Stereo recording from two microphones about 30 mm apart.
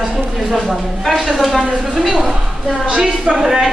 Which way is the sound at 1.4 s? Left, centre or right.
Centre.